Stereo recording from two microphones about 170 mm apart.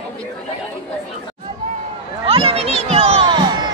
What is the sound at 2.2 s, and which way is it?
Music, 35° right (ahead or behind).